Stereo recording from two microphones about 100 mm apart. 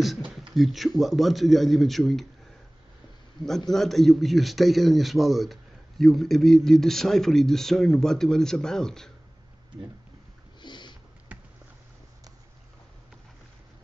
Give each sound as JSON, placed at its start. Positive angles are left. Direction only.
{"t": 0.2, "sound": "a man's voice", "side_deg": 0}
{"t": 3.7, "sound": "a man's voice", "side_deg": 5}
{"t": 10.6, "sound": "sniff", "side_deg": 50}
{"t": 11.3, "sound": "a sound", "side_deg": -15}